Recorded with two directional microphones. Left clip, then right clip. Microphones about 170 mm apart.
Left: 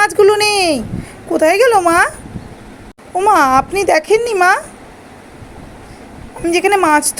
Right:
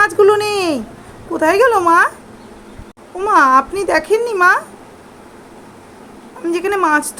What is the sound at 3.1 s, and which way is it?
A woman's voice, 10° left (ahead or behind).